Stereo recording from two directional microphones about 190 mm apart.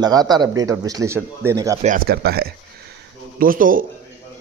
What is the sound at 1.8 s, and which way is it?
Speech, 45° right (ahead or behind).